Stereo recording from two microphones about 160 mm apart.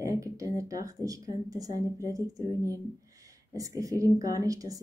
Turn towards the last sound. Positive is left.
turn(degrees=-20)  # may be behind; listen again after turning